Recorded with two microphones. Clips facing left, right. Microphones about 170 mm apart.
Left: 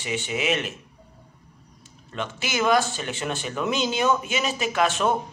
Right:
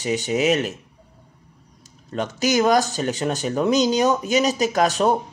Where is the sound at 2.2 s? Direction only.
40° right (ahead or behind).